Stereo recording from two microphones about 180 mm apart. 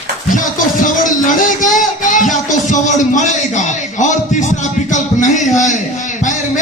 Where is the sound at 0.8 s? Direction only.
45° left (ahead or behind).